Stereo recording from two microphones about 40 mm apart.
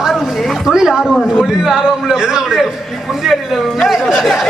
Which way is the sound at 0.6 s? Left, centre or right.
Centre.